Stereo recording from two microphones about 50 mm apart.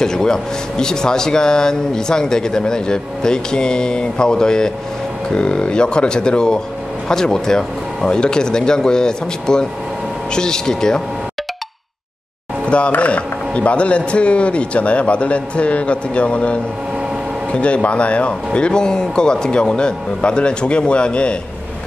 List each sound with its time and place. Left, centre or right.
0.0 s a man's voice: centre
12.6 s a man's voice: left